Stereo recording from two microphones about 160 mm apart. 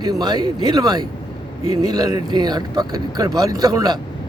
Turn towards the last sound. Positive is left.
turn(degrees=-25)  # may be behind; listen again after turning